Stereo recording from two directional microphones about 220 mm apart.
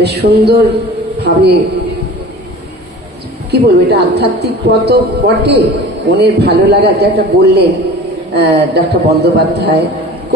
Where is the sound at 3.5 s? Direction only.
45° right (ahead or behind).